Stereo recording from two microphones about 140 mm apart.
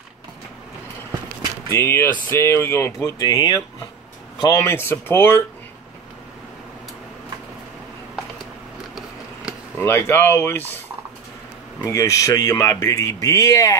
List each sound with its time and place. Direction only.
1.7 s speech: 20° left (ahead or behind)
8.9 s a sound: 5° right (ahead or behind)
9.8 s speech: 15° left (ahead or behind)
11.8 s speech: 25° left (ahead or behind)